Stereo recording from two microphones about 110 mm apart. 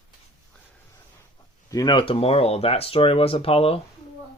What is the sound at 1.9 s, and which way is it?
Speech, 55° left (ahead or behind).